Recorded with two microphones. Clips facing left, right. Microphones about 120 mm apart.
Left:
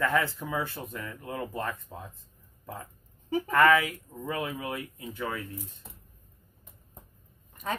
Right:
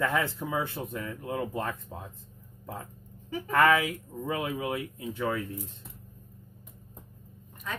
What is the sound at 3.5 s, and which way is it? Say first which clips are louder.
Speech: left 1 dB; 20° right (ahead or behind).